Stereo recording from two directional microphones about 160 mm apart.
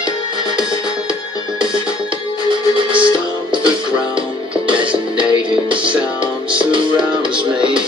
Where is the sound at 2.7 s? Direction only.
30° right (ahead or behind).